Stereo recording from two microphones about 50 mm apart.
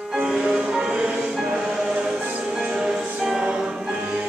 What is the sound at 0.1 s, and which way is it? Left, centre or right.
Music, centre.